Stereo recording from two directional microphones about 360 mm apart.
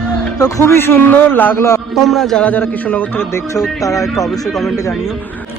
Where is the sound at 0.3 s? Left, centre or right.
Centre.